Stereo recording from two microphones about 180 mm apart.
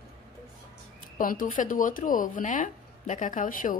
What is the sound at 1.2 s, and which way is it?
Speech, 50° left (ahead or behind).